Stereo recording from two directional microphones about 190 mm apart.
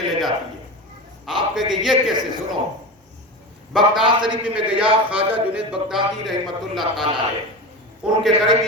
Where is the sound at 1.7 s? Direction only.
Centre (ahead or behind).